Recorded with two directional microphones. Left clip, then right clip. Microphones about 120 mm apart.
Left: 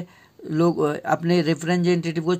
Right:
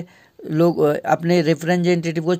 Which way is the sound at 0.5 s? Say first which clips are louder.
Right 4 dB; 50° right (ahead or behind).